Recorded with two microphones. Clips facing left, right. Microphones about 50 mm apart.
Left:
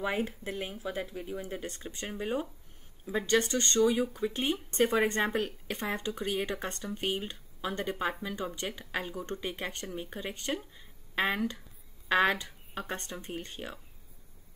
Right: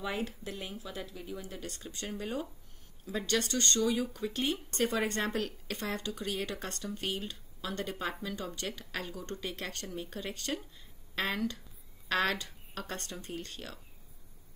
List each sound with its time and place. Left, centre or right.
0.0 s speech: left